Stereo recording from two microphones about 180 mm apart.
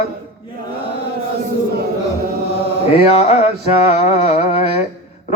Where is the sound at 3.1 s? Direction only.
35° left (ahead or behind).